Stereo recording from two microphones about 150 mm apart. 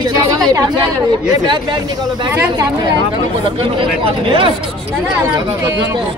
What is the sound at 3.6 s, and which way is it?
Speech, 35° right (ahead or behind).